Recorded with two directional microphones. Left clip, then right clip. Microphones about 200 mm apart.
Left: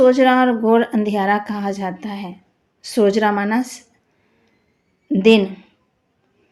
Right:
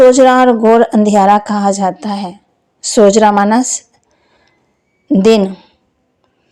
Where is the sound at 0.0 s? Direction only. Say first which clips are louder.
Right 7 dB; 45° right (ahead or behind).